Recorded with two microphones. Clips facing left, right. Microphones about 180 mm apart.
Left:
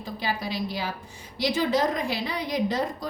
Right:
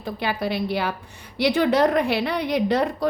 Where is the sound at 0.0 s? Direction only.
60° right (ahead or behind).